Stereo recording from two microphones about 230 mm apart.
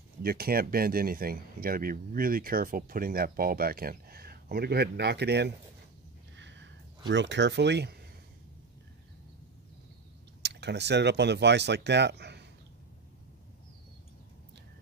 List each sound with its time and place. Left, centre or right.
0.2 s speech: right
6.3 s a sound: right
7.1 s speech: right
10.4 s speech: right